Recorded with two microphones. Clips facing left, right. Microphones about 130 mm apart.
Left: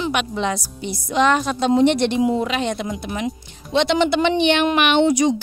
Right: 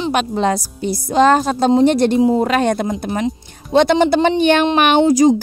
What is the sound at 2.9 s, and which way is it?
Speech, 35° right (ahead or behind).